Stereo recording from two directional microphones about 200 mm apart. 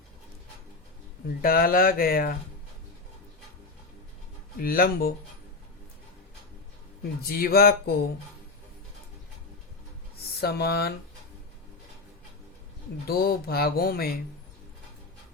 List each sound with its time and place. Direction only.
1.4 s speech: 45° left (ahead or behind)
4.6 s speech: 45° left (ahead or behind)
7.3 s speech: 50° left (ahead or behind)
10.4 s speech: 50° left (ahead or behind)
13.1 s speech: 50° left (ahead or behind)